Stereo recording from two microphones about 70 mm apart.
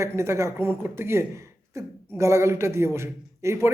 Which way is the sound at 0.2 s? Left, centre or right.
Right.